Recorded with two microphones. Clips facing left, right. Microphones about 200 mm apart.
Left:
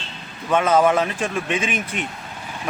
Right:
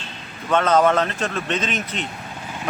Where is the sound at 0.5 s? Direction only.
10° left (ahead or behind).